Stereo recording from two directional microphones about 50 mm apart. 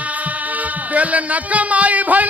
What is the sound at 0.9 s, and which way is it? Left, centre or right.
Speech, right.